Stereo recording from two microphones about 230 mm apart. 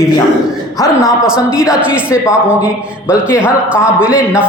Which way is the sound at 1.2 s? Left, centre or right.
Centre.